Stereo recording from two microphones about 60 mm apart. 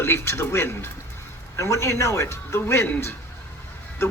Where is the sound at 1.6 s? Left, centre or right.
Left.